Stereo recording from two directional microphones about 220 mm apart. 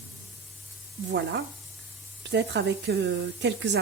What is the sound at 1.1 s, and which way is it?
Speech, 50° right (ahead or behind).